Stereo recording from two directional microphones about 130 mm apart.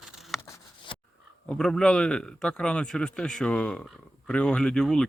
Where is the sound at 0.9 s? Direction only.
40° left (ahead or behind).